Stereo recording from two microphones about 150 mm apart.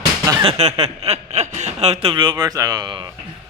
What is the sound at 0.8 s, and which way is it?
Speech, 45° right (ahead or behind).